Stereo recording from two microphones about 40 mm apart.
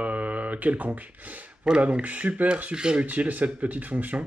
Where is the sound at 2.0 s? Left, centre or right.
Right.